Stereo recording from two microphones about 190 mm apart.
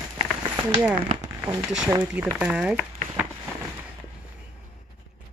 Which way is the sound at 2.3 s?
5° right (ahead or behind).